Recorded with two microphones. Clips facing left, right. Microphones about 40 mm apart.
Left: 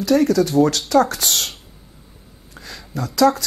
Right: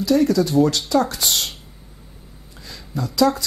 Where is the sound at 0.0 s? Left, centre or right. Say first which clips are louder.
Left 1 dB; left.